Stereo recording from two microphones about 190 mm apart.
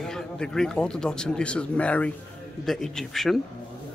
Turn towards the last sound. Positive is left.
turn(degrees=0)  # may be behind; listen again after turning